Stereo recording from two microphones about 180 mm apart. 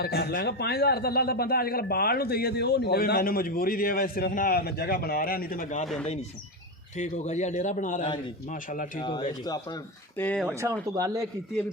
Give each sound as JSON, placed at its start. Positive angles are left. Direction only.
{"t": 0.0, "sound": "speech", "side_deg": 60}
{"t": 5.8, "sound": "speech", "side_deg": 0}
{"t": 6.9, "sound": "a man's voice", "side_deg": 40}
{"t": 9.0, "sound": "speech", "side_deg": 25}
{"t": 10.2, "sound": "speech", "side_deg": 10}
{"t": 10.9, "sound": "a man's voice", "side_deg": -20}